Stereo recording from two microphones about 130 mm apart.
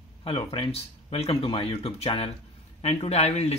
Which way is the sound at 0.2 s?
50° left (ahead or behind).